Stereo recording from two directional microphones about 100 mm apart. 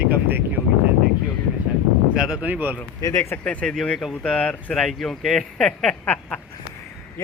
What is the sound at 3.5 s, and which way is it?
Speech, 5° left (ahead or behind).